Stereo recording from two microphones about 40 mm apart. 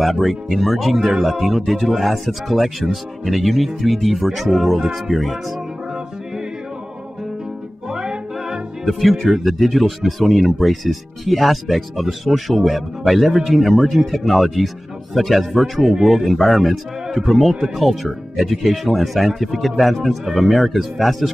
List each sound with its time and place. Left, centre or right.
0.0 s speech: centre
7.9 s music: centre
8.8 s speech: centre